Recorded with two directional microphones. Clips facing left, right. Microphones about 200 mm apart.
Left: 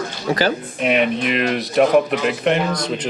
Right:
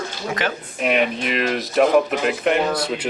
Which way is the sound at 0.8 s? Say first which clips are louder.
Left 2 dB; centre (ahead or behind).